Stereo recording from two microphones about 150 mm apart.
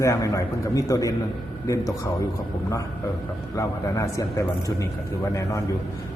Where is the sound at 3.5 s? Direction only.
20° left (ahead or behind).